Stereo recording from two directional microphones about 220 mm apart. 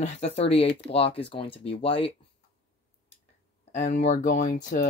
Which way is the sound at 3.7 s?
35° left (ahead or behind).